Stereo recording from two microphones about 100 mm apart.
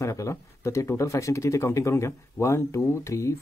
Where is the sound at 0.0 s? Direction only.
30° left (ahead or behind).